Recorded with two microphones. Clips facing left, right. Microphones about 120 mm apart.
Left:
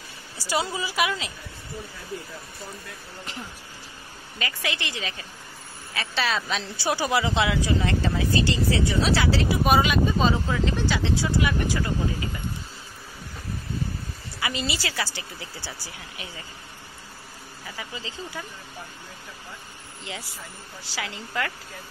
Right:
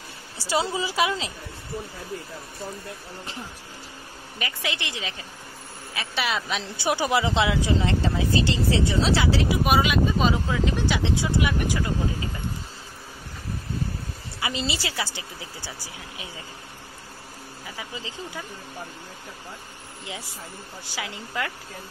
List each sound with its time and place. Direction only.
0.4 s a woman's voice: 25° right (ahead or behind)
4.4 s a woman's voice: 20° right (ahead or behind)
9.7 s speech: 5° right (ahead or behind)
14.4 s a woman's voice: 25° right (ahead or behind)
17.6 s speech: 15° right (ahead or behind)
20.9 s speech: 15° right (ahead or behind)